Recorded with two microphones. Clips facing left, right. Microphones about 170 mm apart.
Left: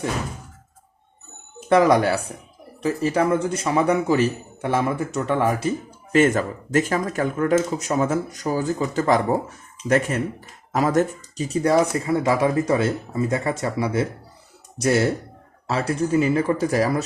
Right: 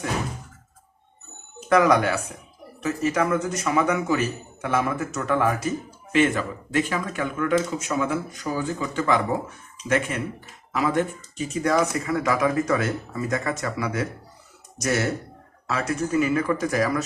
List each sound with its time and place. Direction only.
1.7 s a man's voice: 30° left (ahead or behind)